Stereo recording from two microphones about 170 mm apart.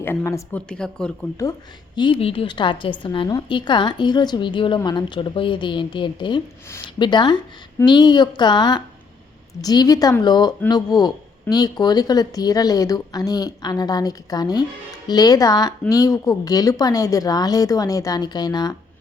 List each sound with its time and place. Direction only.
0.0 s a woman's voice: 15° left (ahead or behind)
0.7 s speech: 5° left (ahead or behind)
2.0 s speech: 30° left (ahead or behind)